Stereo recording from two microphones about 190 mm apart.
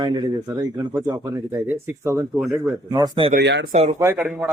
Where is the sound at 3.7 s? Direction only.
35° right (ahead or behind).